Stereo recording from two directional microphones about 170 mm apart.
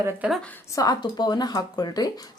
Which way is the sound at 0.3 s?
10° left (ahead or behind).